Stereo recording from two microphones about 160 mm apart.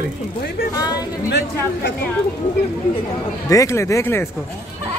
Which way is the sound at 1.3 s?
80° left.